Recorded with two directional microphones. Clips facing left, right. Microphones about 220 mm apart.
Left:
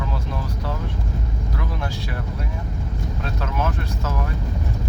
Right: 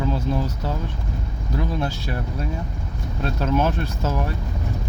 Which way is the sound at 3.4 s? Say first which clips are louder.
Right 6 dB; 30° right (ahead or behind).